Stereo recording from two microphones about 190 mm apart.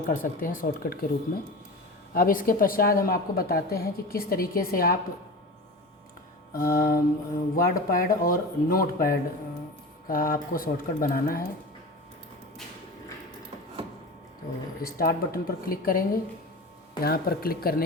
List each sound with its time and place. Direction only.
0.1 s speech: 45° left (ahead or behind)
2.1 s speech: 45° left (ahead or behind)
6.6 s speech: 50° left (ahead or behind)
14.8 s speech: 50° left (ahead or behind)